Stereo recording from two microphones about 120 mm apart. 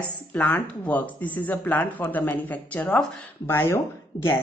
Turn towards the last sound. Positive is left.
turn(degrees=20)  # may be behind; listen again after turning